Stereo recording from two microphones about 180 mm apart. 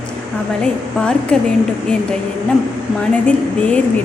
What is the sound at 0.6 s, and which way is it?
Speech, 5° left (ahead or behind).